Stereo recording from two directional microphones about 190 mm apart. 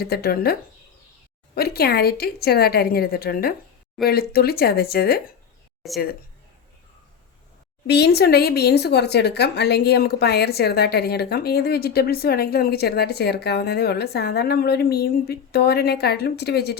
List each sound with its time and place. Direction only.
0.0 s speech: 55° left (ahead or behind)
1.5 s speech: 55° left (ahead or behind)
5.8 s speech: centre (ahead or behind)
7.9 s speech: 60° left (ahead or behind)